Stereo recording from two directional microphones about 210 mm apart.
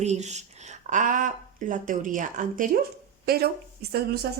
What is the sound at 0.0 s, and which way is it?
Speech, 35° right (ahead or behind).